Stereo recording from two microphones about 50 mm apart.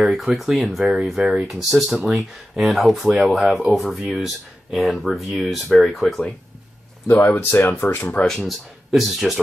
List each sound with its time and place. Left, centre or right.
0.0 s speech: centre
7.1 s speech: left
8.2 s speech: centre
8.5 s speech: centre